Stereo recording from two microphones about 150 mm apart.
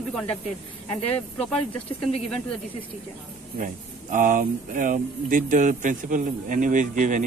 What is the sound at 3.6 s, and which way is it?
Speech, 65° right (ahead or behind).